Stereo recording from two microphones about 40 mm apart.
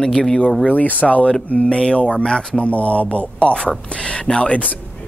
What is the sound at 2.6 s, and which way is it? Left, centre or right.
Speech, left.